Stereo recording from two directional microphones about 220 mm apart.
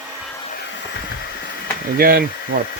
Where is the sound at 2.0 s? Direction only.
45° right (ahead or behind).